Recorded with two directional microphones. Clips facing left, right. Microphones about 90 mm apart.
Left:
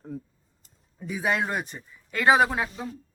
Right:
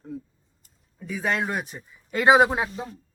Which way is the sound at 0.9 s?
15° left (ahead or behind).